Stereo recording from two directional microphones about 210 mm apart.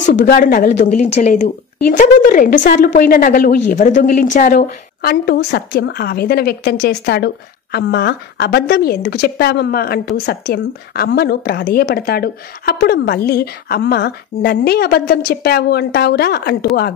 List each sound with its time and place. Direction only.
0.1 s a woman's voice: 40° left (ahead or behind)